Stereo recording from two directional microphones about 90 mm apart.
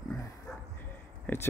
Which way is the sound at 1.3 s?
25° left (ahead or behind).